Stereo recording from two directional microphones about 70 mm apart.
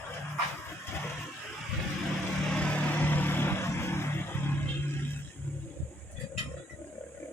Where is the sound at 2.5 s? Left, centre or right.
Centre; by 4.6 s left.